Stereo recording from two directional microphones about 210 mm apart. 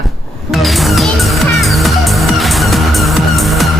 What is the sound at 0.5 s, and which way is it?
Music, centre (ahead or behind).